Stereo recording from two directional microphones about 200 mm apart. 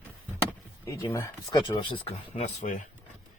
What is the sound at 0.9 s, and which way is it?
Speech, 15° left (ahead or behind).